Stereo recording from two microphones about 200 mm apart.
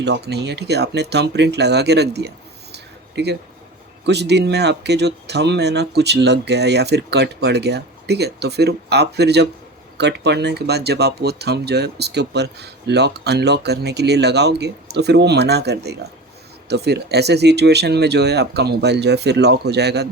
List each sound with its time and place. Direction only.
0.0 s speech: 55° right (ahead or behind)
2.7 s a sound: 55° right (ahead or behind)
4.0 s speech: 55° right (ahead or behind)